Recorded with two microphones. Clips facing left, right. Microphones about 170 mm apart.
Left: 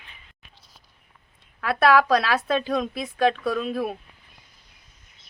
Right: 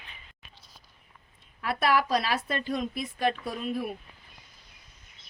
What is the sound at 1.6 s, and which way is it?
A woman's voice, 85° left.